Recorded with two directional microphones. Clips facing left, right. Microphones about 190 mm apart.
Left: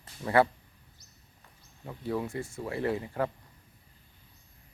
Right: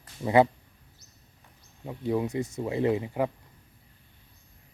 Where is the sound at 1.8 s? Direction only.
20° right (ahead or behind).